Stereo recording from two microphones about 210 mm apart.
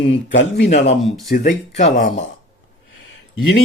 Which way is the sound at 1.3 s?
40° left (ahead or behind).